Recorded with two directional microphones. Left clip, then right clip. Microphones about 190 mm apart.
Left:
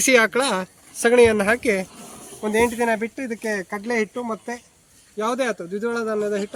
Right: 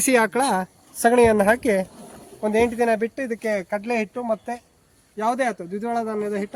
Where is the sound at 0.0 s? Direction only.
50° right (ahead or behind).